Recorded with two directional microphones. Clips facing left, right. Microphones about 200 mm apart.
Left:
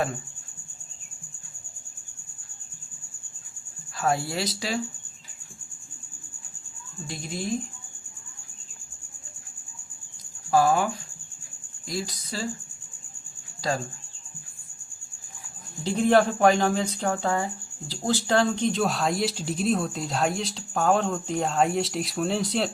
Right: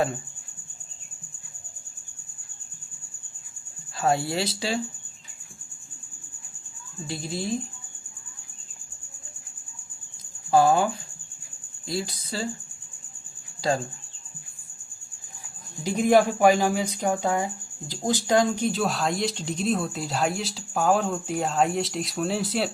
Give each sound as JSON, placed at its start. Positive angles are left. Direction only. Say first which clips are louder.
{"t": 3.9, "sound": "speech", "louder": "right 2 dB", "side_deg": -25}
{"t": 7.1, "sound": "speech", "louder": "right 3 dB", "side_deg": -30}
{"t": 10.5, "sound": "speech", "louder": "right 2 dB", "side_deg": -25}
{"t": 11.9, "sound": "speech", "louder": "right 2 dB", "side_deg": -25}
{"t": 13.6, "sound": "speech", "louder": "right 3 dB", "side_deg": -25}
{"t": 15.8, "sound": "speech", "louder": "right 1 dB", "side_deg": -10}